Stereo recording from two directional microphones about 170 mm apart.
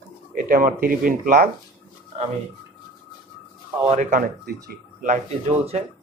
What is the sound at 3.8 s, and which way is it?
Speech, 40° right (ahead or behind).